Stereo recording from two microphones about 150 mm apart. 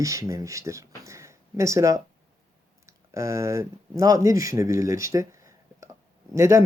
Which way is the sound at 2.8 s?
20° right (ahead or behind).